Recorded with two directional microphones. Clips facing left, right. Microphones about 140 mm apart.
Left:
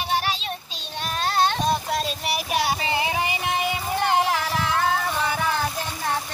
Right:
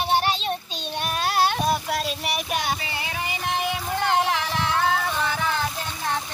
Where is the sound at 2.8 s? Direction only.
20° left (ahead or behind).